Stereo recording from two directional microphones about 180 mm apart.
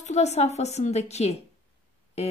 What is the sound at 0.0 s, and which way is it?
A woman's voice, 40° left (ahead or behind).